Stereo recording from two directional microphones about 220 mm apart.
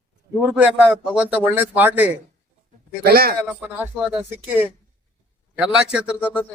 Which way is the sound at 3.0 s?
45° right (ahead or behind).